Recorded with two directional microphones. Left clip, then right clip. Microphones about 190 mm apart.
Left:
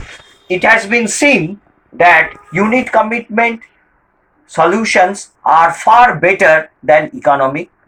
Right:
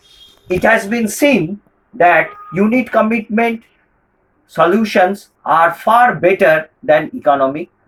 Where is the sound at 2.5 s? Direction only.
25° right (ahead or behind).